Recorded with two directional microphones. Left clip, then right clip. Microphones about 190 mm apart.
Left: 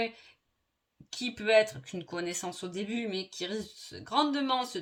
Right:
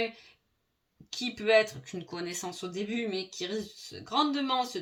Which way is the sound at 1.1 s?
40° left (ahead or behind).